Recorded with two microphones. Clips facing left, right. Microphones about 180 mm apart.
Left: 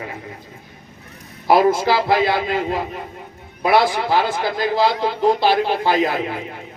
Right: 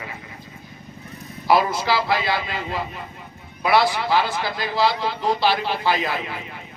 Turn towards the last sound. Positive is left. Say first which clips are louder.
# left 5 dB
turn(degrees=50)  # may be behind; listen again after turning